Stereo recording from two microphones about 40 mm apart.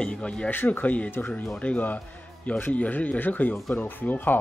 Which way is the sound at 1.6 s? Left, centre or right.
Left.